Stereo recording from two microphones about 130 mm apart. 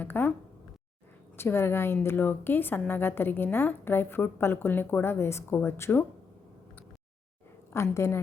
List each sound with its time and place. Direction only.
0.0 s a woman's voice: 15° left (ahead or behind)
1.4 s a woman's voice: 20° left (ahead or behind)
7.7 s a woman's voice: 20° left (ahead or behind)